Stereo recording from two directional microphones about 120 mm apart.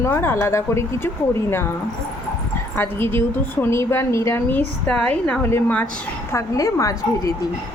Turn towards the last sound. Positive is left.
turn(degrees=30)  # may be behind; listen again after turning